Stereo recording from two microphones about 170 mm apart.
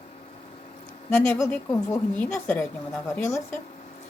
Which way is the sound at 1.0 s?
15° left (ahead or behind).